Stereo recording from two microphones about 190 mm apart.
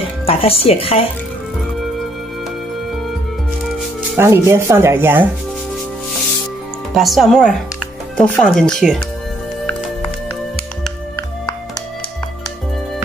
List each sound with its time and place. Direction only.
0.3 s speech: 30° left (ahead or behind)
4.2 s speech: 15° right (ahead or behind)
7.0 s speech: centre (ahead or behind)